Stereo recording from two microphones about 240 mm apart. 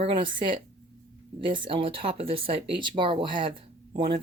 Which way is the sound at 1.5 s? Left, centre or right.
Right.